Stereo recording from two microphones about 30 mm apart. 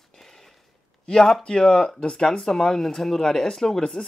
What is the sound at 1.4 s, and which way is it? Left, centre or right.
Speech, left.